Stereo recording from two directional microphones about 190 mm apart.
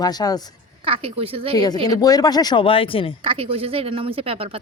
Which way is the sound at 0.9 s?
30° right (ahead or behind).